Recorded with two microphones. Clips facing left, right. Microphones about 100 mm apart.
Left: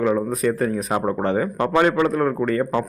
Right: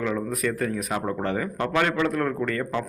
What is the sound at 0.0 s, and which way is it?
A man's voice, 30° left (ahead or behind).